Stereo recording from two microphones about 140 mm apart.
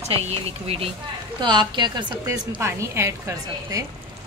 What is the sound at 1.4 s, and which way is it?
Speech, 35° right (ahead or behind).